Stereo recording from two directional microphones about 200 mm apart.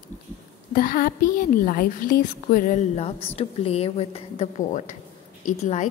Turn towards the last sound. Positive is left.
turn(degrees=35)  # may be behind; listen again after turning